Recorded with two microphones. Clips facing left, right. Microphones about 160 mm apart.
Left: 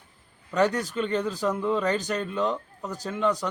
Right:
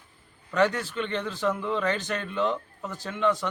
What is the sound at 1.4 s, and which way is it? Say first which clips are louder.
Speech: right 1 dB; 10° left (ahead or behind).